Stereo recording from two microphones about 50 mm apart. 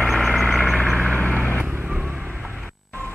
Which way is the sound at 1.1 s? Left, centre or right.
Left.